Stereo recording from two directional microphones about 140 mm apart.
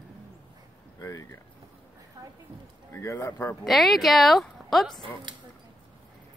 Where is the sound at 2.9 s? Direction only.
20° left (ahead or behind).